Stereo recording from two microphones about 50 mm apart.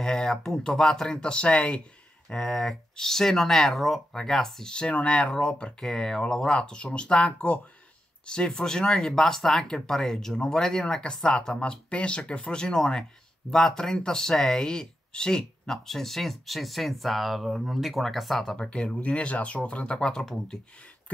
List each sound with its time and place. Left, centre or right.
0.0 s speech: centre
8.3 s speech: centre
18.6 s speech: centre